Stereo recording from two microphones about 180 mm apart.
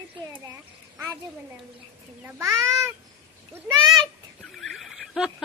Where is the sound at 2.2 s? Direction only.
15° right (ahead or behind).